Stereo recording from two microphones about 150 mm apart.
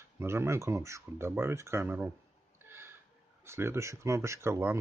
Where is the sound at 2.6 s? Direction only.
15° right (ahead or behind).